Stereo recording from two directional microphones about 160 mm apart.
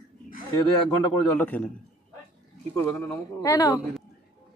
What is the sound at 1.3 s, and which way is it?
Speech, 10° left (ahead or behind).